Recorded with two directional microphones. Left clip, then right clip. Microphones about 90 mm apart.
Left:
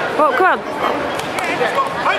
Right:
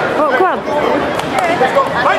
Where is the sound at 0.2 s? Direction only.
25° left (ahead or behind).